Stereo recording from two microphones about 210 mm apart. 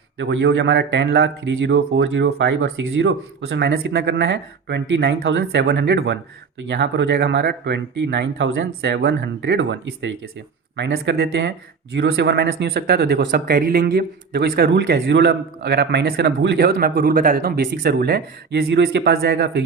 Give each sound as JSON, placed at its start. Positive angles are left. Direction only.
{"t": 0.2, "sound": "speech", "side_deg": -60}